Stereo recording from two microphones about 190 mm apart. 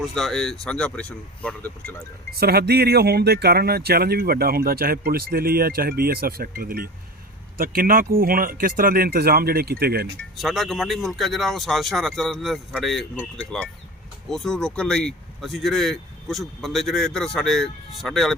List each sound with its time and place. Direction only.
0.0 s speech: centre (ahead or behind)
2.3 s speech: 55° right (ahead or behind)
10.3 s speech: centre (ahead or behind)